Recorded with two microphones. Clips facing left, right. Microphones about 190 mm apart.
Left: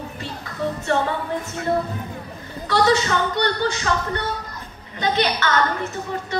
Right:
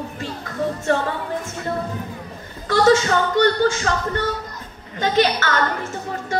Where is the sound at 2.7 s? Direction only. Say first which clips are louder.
Right 3 dB; 45° right (ahead or behind).